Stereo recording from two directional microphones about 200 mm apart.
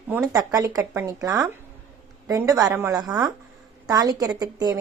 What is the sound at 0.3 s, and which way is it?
A woman's voice, 15° right (ahead or behind).